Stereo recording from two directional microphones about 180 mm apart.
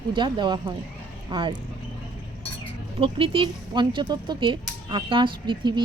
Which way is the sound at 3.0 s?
30° right (ahead or behind).